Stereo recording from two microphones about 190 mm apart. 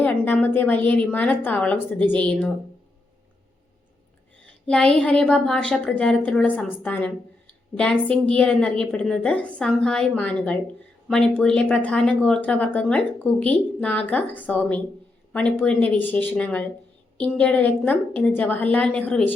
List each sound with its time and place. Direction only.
0.0 s speech: 5° left (ahead or behind)
4.6 s a woman's voice: 5° left (ahead or behind)